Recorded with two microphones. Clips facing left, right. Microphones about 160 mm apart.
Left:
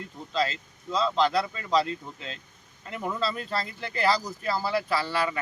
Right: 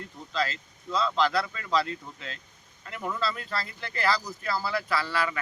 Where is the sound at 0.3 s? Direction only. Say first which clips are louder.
Left 2 dB; 25° left (ahead or behind).